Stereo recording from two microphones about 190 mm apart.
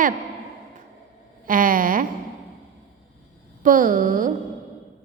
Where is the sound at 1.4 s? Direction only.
45° right (ahead or behind).